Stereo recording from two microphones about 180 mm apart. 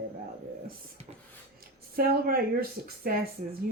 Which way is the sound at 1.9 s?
55° right (ahead or behind).